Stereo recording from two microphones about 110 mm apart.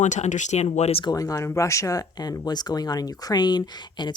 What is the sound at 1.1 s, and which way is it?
Speech, 30° left (ahead or behind).